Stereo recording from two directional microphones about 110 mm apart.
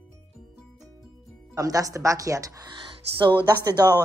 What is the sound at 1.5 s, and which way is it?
Speech, 35° right (ahead or behind).